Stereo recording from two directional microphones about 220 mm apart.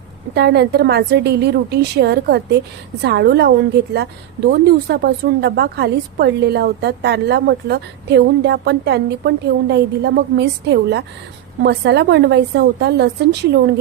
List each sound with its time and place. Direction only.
0.3 s speech: 50° right (ahead or behind)